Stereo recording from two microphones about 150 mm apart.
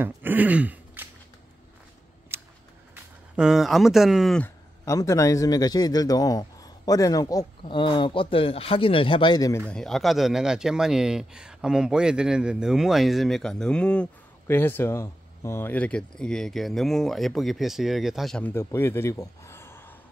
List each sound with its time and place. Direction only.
0.0 s a sound: 15° right (ahead or behind)
2.3 s scissors: 15° right (ahead or behind)
3.3 s speech: 5° right (ahead or behind)
4.8 s a man's voice: 20° left (ahead or behind)
9.7 s speech: 5° left (ahead or behind)
18.5 s speech: 20° left (ahead or behind)